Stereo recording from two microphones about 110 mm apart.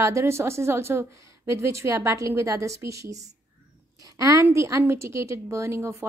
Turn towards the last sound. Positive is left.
turn(degrees=-25)  # may be behind; listen again after turning